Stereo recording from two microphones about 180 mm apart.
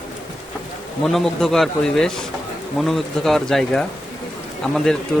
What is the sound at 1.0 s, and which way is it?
Speech, centre (ahead or behind).